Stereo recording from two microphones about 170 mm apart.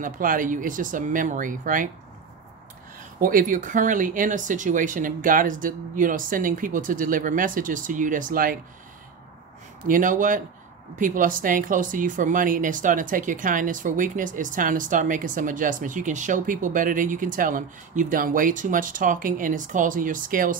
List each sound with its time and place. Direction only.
0.0 s speech: 55° right (ahead or behind)
3.2 s speech: 55° right (ahead or behind)
9.8 s speech: 50° right (ahead or behind)